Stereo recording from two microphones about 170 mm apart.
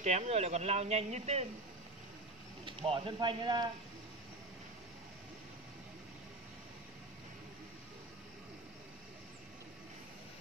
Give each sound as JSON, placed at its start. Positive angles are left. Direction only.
{"t": 0.0, "sound": "speech", "side_deg": -40}
{"t": 2.6, "sound": "speech", "side_deg": -30}